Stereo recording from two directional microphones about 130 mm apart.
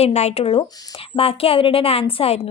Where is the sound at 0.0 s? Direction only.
55° left (ahead or behind).